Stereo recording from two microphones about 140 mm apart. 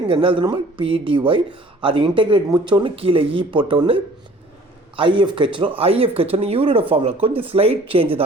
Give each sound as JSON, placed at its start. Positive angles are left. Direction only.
{"t": 0.1, "sound": "speech", "side_deg": -40}